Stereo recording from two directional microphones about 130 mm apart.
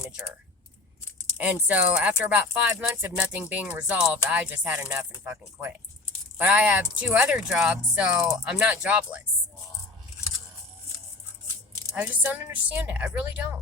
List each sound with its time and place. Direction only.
1.4 s speech: 10° right (ahead or behind)
11.9 s speech: 10° right (ahead or behind)